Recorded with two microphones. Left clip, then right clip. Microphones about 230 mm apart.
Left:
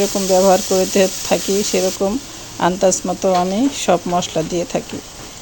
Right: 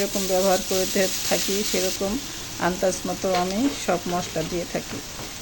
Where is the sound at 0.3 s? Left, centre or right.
Left.